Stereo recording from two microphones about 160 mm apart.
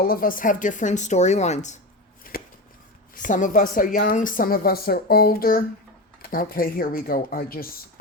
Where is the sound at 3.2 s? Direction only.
55° left (ahead or behind).